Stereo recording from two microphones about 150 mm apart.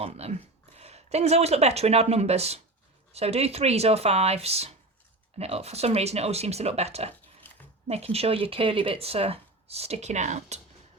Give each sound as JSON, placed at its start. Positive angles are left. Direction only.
{"t": 0.0, "sound": "speech", "side_deg": -45}